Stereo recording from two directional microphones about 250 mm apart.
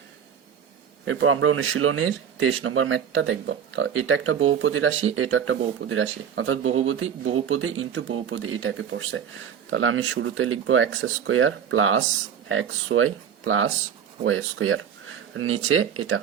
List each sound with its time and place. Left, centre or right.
1.0 s speech: right